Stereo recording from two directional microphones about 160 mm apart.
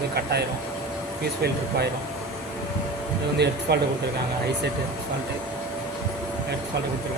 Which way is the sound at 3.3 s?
90° right.